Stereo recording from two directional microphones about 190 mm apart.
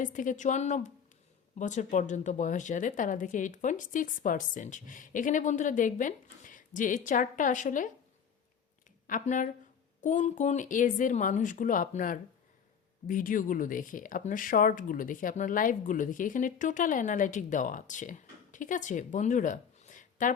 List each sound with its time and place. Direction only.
0.0 s a woman's voice: 45° left (ahead or behind)
9.0 s speech: 40° left (ahead or behind)